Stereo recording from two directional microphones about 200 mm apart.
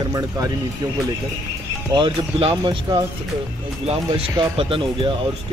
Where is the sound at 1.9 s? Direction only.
25° right (ahead or behind).